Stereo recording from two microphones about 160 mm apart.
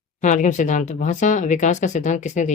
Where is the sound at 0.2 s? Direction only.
50° left (ahead or behind).